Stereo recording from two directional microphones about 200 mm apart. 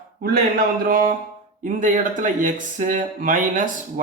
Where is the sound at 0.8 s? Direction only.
45° right (ahead or behind).